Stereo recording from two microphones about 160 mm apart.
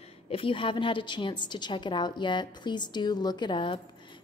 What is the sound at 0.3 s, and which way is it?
A woman's voice, 35° left (ahead or behind).